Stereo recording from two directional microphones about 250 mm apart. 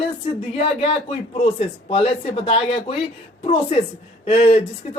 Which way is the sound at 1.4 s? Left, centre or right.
Left.